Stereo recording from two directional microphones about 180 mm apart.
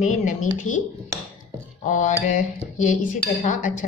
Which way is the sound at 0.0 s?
45° left (ahead or behind).